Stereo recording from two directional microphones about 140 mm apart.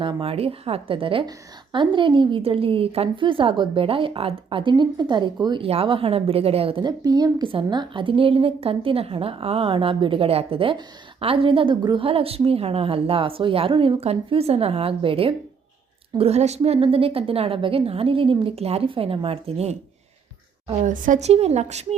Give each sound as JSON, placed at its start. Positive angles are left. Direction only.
{"t": 0.0, "sound": "a woman's voice", "side_deg": -40}
{"t": 20.8, "sound": "a woman's voice", "side_deg": -70}